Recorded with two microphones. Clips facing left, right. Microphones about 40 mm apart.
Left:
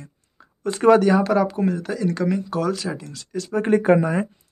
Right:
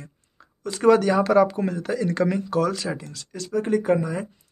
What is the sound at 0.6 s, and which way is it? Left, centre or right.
Speech, left.